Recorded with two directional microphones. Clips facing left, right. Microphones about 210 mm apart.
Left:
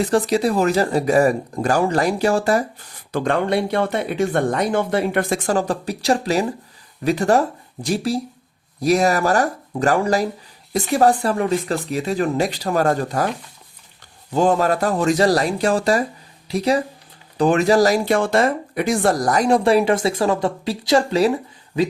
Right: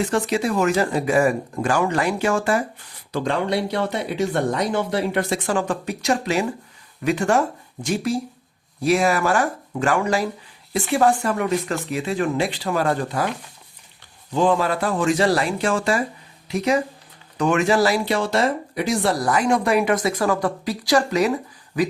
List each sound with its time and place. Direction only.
0.0 s speech: 35° left (ahead or behind)
3.1 s speech: 55° left (ahead or behind)
14.3 s speech: 45° left (ahead or behind)